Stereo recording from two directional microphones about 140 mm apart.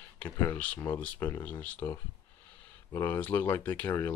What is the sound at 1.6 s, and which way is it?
Speech, 15° left (ahead or behind).